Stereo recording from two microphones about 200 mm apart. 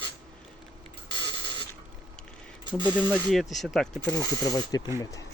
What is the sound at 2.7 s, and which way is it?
Speech, 20° right (ahead or behind).